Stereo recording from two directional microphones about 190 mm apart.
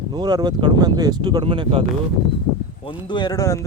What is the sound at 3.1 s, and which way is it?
Speech, 20° left (ahead or behind).